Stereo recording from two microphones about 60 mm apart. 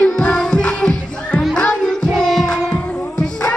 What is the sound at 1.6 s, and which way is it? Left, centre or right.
Child singing, centre.